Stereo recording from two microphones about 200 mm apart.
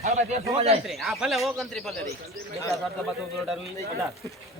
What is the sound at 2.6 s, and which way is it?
Speech, 15° left (ahead or behind).